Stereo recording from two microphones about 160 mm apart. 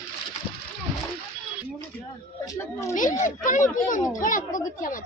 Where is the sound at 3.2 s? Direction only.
55° left (ahead or behind).